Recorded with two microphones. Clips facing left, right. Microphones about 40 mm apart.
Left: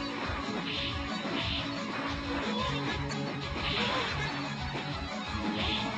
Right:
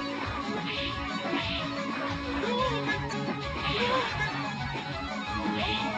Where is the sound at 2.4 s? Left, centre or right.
Right.